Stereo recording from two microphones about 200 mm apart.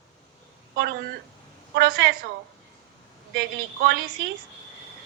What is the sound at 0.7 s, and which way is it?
A woman's voice, 55° right (ahead or behind).